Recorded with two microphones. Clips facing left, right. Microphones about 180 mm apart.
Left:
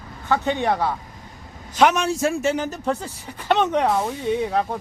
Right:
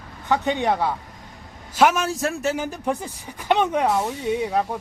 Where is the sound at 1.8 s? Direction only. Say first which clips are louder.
Left 1 dB; 5° right (ahead or behind).